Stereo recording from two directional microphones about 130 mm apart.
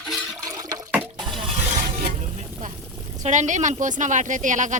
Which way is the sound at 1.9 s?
60° right (ahead or behind).